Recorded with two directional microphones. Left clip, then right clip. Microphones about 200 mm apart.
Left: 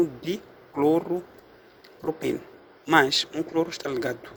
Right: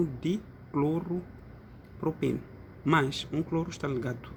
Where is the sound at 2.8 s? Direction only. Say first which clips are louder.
Left 7 dB; 30° left (ahead or behind).